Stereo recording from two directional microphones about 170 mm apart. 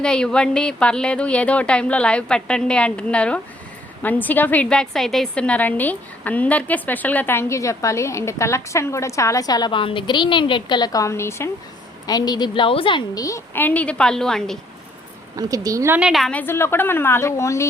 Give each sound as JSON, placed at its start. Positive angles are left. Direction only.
{"t": 0.0, "sound": "a woman's voice", "side_deg": 5}
{"t": 15.4, "sound": "a woman's voice", "side_deg": -20}